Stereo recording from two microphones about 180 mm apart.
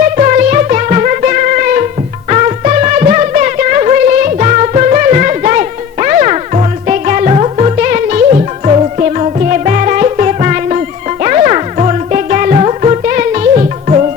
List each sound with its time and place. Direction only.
0.2 s music: 45° right (ahead or behind)